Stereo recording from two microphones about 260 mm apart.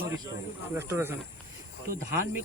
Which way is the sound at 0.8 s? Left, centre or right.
Centre.